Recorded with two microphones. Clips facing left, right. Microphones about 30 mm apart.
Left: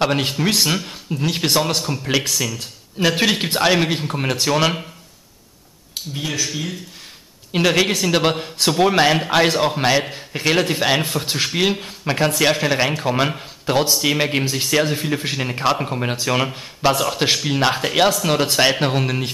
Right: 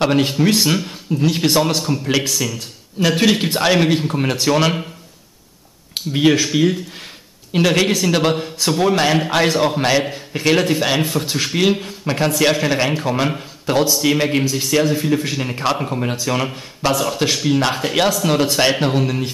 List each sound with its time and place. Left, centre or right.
0.0 s a man's voice: centre
5.9 s speech: right
6.4 s speech: right
7.5 s a man's voice: centre
14.5 s speech: left
14.8 s a man's voice: centre
15.1 s speech: left
15.4 s a man's voice: centre